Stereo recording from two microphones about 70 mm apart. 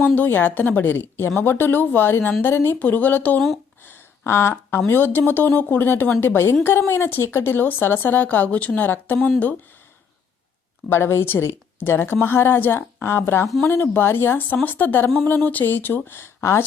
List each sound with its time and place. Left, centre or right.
0.2 s a woman's voice: left
3.8 s a sound: left
4.9 s a woman's voice: left
10.8 s a woman's voice: left